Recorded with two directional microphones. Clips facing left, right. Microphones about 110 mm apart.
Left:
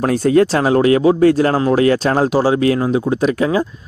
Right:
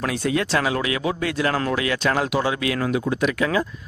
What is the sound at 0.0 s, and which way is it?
Speech, 40° left (ahead or behind).